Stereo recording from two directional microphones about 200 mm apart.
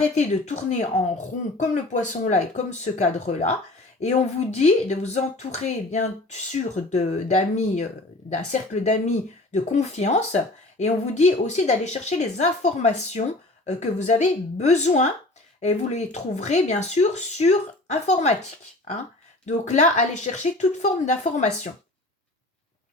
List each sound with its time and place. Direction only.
0.1 s speech: 35° left (ahead or behind)
19.5 s speech: 35° left (ahead or behind)